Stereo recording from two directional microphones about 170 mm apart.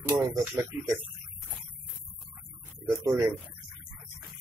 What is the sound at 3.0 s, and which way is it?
Speech, 20° right (ahead or behind).